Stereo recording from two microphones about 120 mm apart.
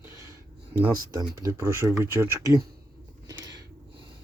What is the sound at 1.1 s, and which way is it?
Speech, 30° right (ahead or behind).